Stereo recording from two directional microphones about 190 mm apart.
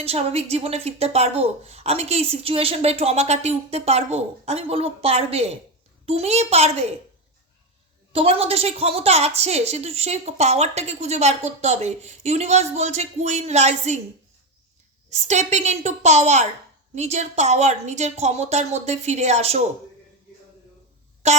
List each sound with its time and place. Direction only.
0.0 s a woman's voice: 30° right (ahead or behind)
8.1 s a woman's voice: 30° right (ahead or behind)
15.1 s a woman's voice: 35° right (ahead or behind)
21.2 s music: 35° right (ahead or behind)